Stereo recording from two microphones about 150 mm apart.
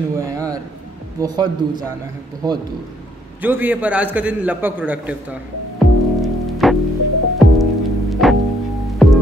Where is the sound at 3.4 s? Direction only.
10° right (ahead or behind).